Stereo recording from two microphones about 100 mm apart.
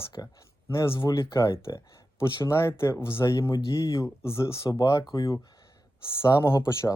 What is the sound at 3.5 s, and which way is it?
Speech, 45° left (ahead or behind).